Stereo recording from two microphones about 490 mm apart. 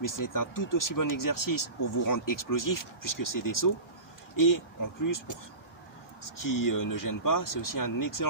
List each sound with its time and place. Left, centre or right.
0.0 s speech: left